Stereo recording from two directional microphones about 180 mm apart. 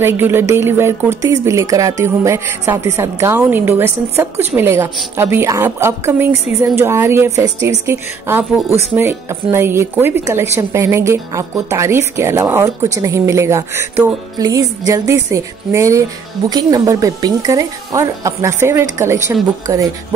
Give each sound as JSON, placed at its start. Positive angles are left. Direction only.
{"t": 0.0, "sound": "a woman's voice", "side_deg": -10}